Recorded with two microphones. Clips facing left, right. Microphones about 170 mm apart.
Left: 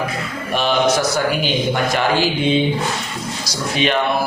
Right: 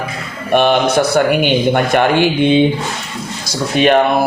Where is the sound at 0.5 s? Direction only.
60° right (ahead or behind).